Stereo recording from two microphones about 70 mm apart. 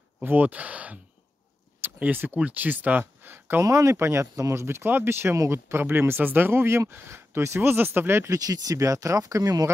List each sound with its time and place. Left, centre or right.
0.2 s speech: right
2.0 s speech: right
3.6 s speech: right
8.3 s speech: right